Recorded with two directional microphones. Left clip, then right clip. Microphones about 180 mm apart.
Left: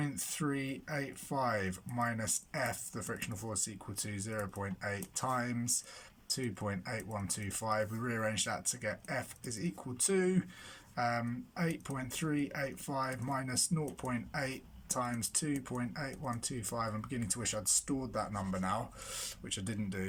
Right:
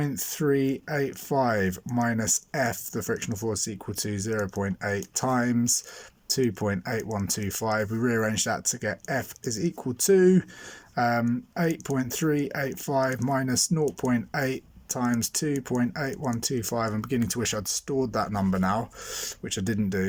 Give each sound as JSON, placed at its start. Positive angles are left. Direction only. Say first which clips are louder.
{"t": 0.0, "sound": "speech", "louder": "right 10 dB", "side_deg": -40}